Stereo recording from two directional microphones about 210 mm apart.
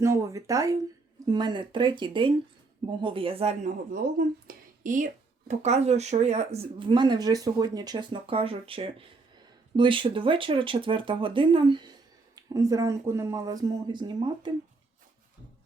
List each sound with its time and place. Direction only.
0.0 s speech: 15° right (ahead or behind)